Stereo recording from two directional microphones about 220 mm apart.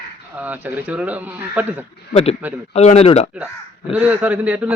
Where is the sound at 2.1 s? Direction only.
25° left (ahead or behind).